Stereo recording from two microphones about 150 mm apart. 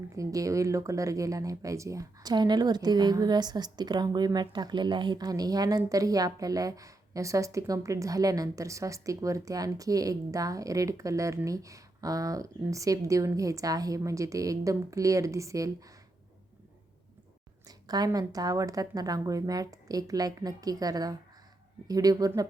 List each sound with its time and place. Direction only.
0.2 s speech: 20° right (ahead or behind)
17.7 s speech: 25° right (ahead or behind)